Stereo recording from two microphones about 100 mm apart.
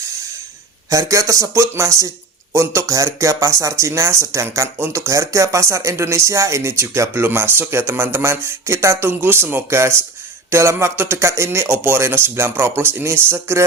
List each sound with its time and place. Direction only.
0.9 s speech: 35° right (ahead or behind)